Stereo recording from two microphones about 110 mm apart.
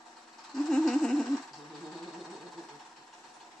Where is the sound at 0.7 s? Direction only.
5° left (ahead or behind).